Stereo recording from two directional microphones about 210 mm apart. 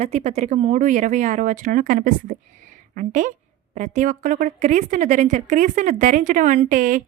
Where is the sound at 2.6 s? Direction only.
40° right (ahead or behind).